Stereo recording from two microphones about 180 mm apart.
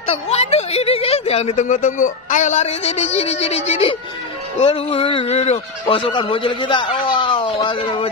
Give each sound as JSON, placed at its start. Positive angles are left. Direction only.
{"t": 0.0, "sound": "a woman's voice", "side_deg": 35}